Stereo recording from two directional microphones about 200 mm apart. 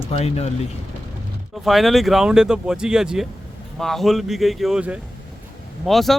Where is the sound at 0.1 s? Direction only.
30° left (ahead or behind).